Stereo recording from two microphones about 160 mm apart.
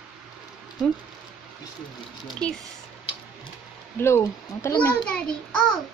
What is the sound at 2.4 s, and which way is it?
Speech, 5° left (ahead or behind).